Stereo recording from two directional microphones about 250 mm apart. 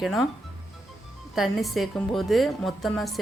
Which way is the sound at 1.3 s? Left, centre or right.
Centre.